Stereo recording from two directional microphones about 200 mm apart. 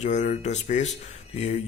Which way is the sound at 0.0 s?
35° left (ahead or behind).